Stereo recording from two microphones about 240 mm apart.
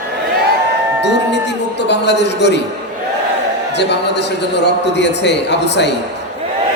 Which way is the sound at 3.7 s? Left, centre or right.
Left.